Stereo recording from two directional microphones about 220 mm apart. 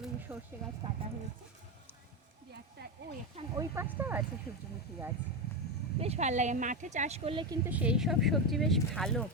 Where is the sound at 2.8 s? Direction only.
50° right (ahead or behind).